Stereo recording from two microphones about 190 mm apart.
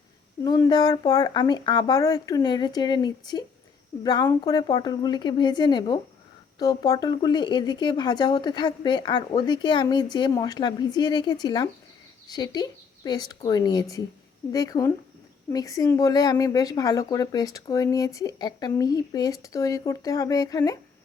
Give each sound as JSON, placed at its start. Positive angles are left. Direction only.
{"t": 0.4, "sound": "speech", "side_deg": 20}